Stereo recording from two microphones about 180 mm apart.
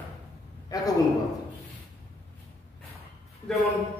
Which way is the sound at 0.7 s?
20° left (ahead or behind).